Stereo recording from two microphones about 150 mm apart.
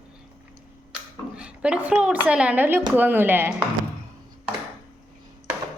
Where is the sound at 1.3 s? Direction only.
5° right (ahead or behind).